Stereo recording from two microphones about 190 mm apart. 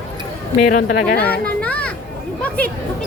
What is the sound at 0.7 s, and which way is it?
Speech, 50° left (ahead or behind).